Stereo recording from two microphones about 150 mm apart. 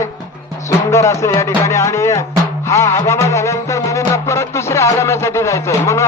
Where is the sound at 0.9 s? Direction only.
20° left (ahead or behind).